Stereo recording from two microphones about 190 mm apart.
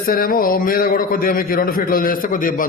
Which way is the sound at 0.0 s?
50° left (ahead or behind).